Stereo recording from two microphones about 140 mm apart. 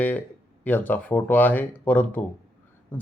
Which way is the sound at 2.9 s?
15° left (ahead or behind).